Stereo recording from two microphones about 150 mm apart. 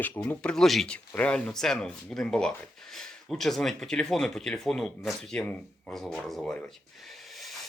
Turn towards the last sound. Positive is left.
turn(degrees=0)  # may be behind; listen again after turning